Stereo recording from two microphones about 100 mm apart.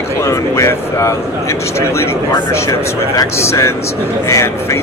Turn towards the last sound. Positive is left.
turn(degrees=30)  # may be behind; listen again after turning